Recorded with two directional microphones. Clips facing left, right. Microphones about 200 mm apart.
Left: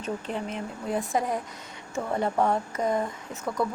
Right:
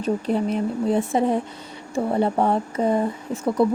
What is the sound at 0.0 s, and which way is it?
A woman's voice, 35° right (ahead or behind).